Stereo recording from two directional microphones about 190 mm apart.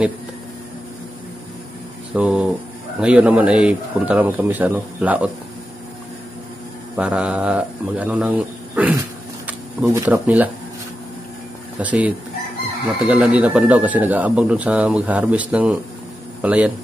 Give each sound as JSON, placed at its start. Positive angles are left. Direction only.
{"t": 2.1, "sound": "speech", "side_deg": -5}
{"t": 7.0, "sound": "speech", "side_deg": -5}
{"t": 11.8, "sound": "a man's voice", "side_deg": -5}